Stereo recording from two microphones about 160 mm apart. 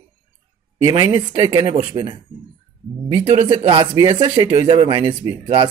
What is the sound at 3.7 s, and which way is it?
Speech, 25° right (ahead or behind).